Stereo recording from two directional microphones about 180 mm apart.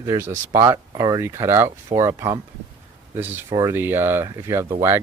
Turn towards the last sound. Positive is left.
turn(degrees=-15)  # may be behind; listen again after turning